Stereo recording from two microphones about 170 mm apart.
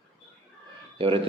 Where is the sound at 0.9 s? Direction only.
30° right (ahead or behind).